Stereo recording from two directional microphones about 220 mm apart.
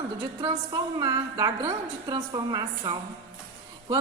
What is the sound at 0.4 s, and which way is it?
A woman's voice, 15° right (ahead or behind).